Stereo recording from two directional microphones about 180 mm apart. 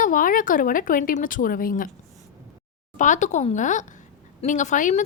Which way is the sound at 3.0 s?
45° left (ahead or behind).